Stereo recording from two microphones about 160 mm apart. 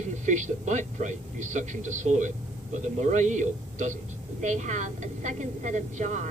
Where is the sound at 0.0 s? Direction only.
50° right (ahead or behind).